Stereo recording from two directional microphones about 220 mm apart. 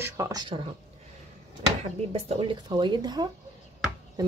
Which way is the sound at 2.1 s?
25° right (ahead or behind).